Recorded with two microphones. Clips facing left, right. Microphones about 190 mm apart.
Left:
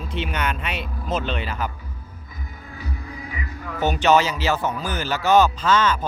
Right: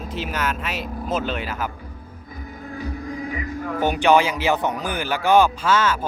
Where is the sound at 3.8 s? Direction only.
10° right (ahead or behind).